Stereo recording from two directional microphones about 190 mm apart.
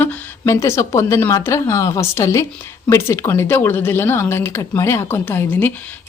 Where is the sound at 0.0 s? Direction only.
15° left (ahead or behind).